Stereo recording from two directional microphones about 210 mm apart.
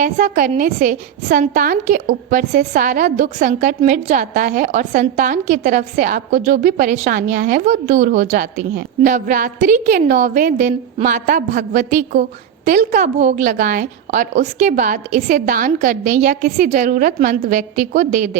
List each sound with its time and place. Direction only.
0.0 s a woman's voice: 40° right (ahead or behind)